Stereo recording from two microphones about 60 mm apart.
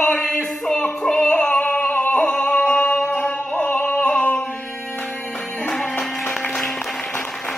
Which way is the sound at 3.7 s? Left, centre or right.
Left.